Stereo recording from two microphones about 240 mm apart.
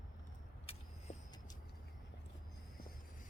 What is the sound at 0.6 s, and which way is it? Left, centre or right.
Vehicle, left.